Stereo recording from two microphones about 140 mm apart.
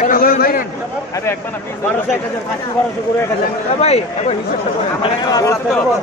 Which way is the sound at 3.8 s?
50° left (ahead or behind).